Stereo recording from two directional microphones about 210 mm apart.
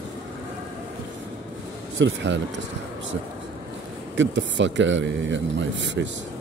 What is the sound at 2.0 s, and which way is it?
Speech, 60° right (ahead or behind).